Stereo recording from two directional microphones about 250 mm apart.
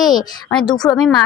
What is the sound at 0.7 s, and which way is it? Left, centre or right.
Speech, centre.